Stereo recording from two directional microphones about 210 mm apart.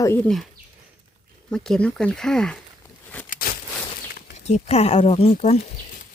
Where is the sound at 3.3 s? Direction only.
45° left (ahead or behind).